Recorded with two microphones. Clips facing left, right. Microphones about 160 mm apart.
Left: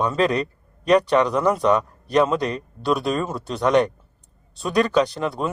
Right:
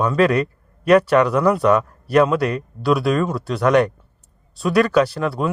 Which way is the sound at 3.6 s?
20° left (ahead or behind).